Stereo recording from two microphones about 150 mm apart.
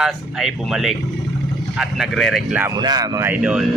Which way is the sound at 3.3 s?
10° right (ahead or behind).